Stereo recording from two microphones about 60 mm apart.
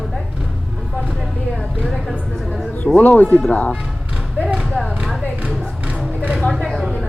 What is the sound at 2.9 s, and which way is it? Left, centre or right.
Speech, left.